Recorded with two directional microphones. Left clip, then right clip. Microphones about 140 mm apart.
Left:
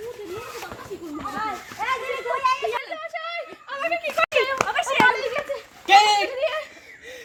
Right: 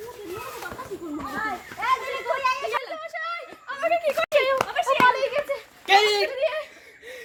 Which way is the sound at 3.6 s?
20° right (ahead or behind).